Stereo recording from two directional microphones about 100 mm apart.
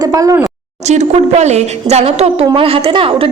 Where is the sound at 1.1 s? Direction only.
90° right.